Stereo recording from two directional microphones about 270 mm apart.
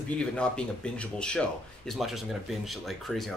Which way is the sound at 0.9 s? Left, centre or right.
Centre.